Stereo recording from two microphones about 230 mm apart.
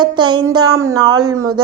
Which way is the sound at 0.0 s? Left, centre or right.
Centre.